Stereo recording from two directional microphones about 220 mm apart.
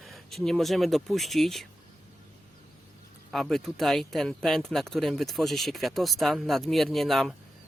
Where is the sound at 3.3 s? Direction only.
Centre (ahead or behind).